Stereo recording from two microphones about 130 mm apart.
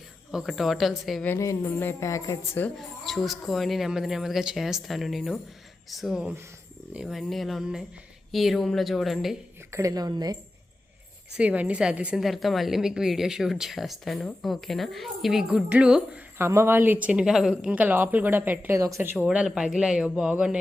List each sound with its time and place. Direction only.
0.3 s a woman's voice: 5° right (ahead or behind)
1.4 s a woman's voice: 25° left (ahead or behind)
2.7 s a woman's voice: centre (ahead or behind)
9.7 s a woman's voice: 25° right (ahead or behind)
11.3 s a woman's voice: 10° right (ahead or behind)
16.4 s speech: 20° right (ahead or behind); by 17.7 s centre (ahead or behind)
17.7 s a woman's voice: 15° right (ahead or behind)
19.2 s speech: 10° right (ahead or behind)